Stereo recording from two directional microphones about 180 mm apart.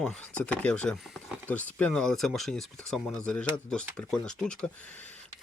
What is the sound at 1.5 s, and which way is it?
Speech, 10° left (ahead or behind).